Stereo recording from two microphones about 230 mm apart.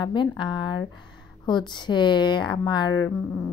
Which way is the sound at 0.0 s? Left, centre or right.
Centre.